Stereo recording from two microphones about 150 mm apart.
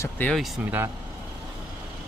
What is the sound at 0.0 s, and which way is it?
Speech, 15° left (ahead or behind).